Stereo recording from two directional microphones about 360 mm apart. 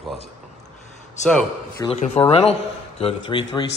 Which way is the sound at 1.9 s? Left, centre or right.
Centre.